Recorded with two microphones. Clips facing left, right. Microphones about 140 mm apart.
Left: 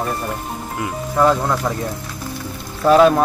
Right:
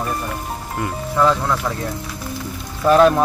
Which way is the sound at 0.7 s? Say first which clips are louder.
Left 1 dB; 5° left (ahead or behind).